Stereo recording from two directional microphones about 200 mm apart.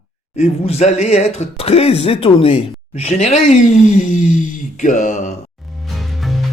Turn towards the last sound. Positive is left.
turn(degrees=0)  # may be behind; listen again after turning